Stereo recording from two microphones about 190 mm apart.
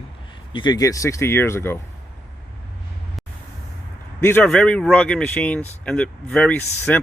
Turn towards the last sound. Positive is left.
turn(degrees=5)  # may be behind; listen again after turning